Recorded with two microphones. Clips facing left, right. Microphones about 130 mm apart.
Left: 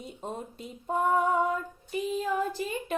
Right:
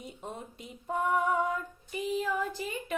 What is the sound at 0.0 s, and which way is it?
Female singing, 35° left (ahead or behind).